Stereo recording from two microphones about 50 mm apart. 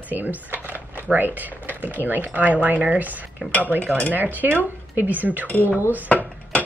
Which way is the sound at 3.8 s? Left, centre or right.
Left.